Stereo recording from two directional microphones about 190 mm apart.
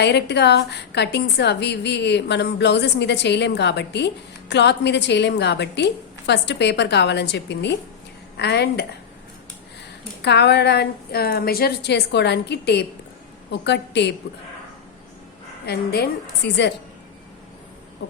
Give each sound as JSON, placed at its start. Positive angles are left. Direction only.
{"t": 0.0, "sound": "a woman's voice", "side_deg": 65}
{"t": 10.2, "sound": "a woman's voice", "side_deg": 65}
{"t": 15.6, "sound": "a woman's voice", "side_deg": 55}